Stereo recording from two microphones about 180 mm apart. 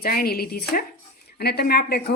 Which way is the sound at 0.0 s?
55° left (ahead or behind).